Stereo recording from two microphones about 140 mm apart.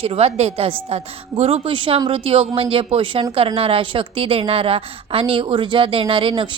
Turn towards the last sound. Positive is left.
turn(degrees=-40)  # may be behind; listen again after turning